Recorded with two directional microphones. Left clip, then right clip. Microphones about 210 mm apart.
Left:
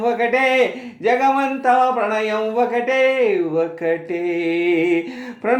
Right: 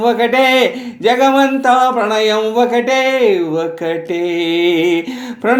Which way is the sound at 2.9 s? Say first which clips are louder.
Right 2 dB; 35° right (ahead or behind).